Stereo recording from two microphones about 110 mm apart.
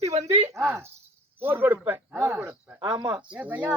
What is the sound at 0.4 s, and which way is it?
A man's voice, 25° right (ahead or behind).